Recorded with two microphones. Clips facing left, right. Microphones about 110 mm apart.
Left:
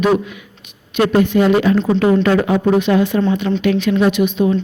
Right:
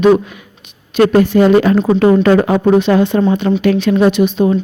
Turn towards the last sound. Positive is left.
turn(degrees=-30)  # may be behind; listen again after turning